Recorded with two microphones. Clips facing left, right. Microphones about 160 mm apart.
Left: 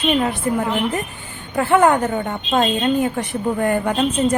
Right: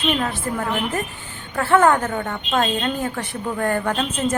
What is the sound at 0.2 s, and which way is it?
A woman's voice, 15° left (ahead or behind).